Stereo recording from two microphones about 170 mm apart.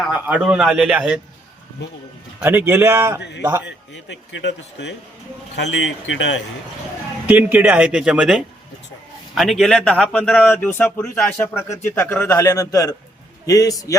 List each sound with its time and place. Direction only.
0.0 s a man's voice: 5° right (ahead or behind)
2.4 s speech: 10° right (ahead or behind)
3.2 s speech: 90° left
7.3 s a man's voice: 10° right (ahead or behind); by 12.4 s 10° left (ahead or behind)
12.4 s a man's voice: 20° left (ahead or behind)